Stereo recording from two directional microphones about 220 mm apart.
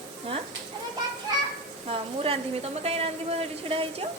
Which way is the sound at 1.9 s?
25° right (ahead or behind).